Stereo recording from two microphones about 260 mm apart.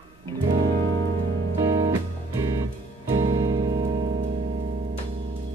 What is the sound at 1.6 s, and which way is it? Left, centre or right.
Music, centre.